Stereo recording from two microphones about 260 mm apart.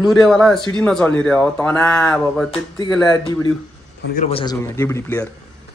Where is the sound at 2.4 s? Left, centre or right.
Centre.